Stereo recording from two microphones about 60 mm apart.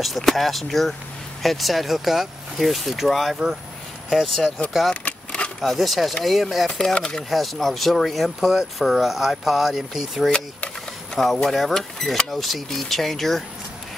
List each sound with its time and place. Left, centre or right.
0.0 s speech: centre
5.0 s a sound: centre
5.6 s speech: centre
6.7 s speech: centre
7.2 s speech: centre
10.2 s speech: centre